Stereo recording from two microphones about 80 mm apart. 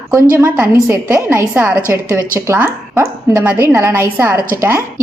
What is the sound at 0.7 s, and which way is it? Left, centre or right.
Speech, right.